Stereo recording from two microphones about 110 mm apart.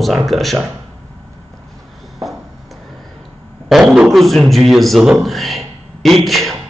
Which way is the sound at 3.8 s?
10° right (ahead or behind).